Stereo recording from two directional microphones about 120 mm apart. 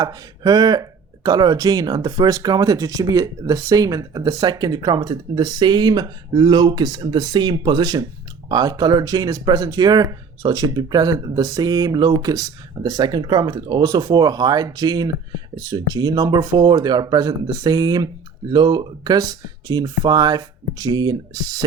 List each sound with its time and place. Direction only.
0.0 s speech: 35° right (ahead or behind)